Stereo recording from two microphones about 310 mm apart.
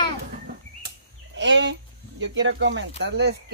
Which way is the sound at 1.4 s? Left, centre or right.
Right.